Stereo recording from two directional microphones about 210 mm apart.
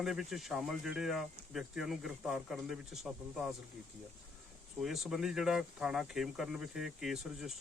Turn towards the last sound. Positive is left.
turn(degrees=0)  # may be behind; listen again after turning